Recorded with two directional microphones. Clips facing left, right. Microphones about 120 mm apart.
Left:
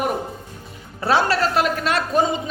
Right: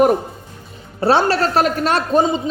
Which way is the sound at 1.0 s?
30° right (ahead or behind).